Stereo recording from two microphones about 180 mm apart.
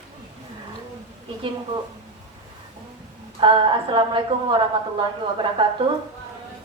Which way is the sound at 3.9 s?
30° right (ahead or behind).